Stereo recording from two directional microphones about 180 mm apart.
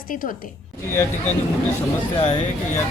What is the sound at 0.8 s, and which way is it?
Speech, 15° left (ahead or behind).